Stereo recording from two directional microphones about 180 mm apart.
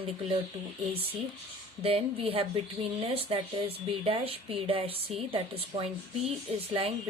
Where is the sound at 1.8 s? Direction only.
30° right (ahead or behind).